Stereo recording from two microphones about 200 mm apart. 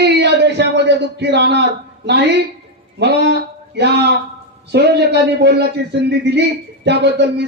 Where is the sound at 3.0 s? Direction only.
60° right (ahead or behind).